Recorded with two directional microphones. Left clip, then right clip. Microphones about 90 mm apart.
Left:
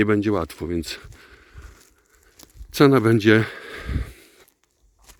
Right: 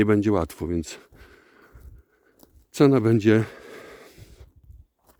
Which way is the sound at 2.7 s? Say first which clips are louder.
Left 3 dB; 25° right (ahead or behind).